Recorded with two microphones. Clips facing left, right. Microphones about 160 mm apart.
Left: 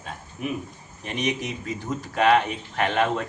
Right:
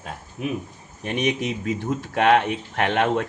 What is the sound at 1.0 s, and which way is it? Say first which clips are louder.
Speech: right 4 dB; 60° right (ahead or behind).